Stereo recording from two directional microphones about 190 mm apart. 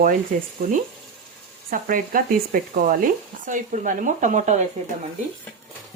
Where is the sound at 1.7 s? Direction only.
45° right (ahead or behind).